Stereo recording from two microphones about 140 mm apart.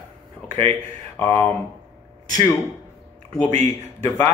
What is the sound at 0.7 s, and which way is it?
Speech, 15° left (ahead or behind).